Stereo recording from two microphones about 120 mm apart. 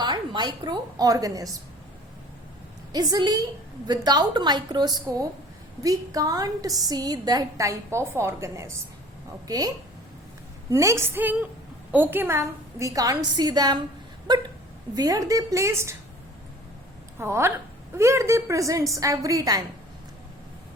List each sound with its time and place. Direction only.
0.0 s a woman's voice: 40° right (ahead or behind)
2.9 s a woman's voice: 35° right (ahead or behind)
17.2 s a woman's voice: 20° right (ahead or behind)